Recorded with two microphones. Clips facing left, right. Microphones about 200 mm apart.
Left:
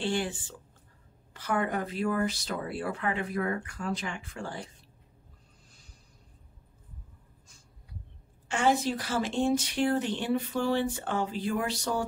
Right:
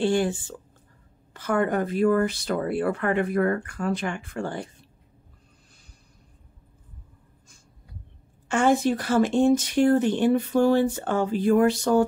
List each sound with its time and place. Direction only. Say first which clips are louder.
0.0 s speech: right 8 dB; 45° right (ahead or behind)
8.5 s speech: right 6 dB; 50° right (ahead or behind)